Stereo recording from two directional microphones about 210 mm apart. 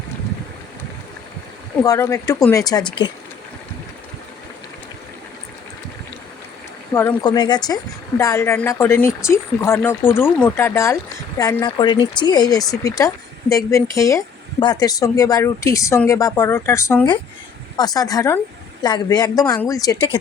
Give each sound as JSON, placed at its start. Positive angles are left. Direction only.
{"t": 1.8, "sound": "speech", "side_deg": 15}
{"t": 6.9, "sound": "speech", "side_deg": 10}